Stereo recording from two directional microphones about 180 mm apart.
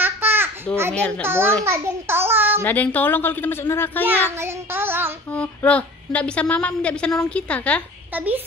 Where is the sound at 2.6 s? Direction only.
10° left (ahead or behind).